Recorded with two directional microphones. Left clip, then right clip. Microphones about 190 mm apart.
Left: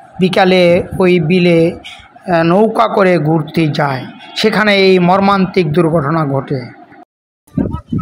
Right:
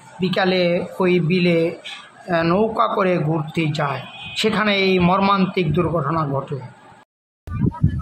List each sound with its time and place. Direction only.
0.2 s speech: 30° left (ahead or behind)